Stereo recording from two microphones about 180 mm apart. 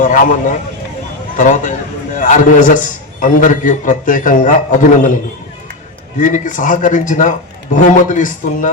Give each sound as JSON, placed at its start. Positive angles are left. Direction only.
{"t": 0.0, "sound": "a man's voice", "side_deg": 45}
{"t": 6.1, "sound": "a man's voice", "side_deg": 45}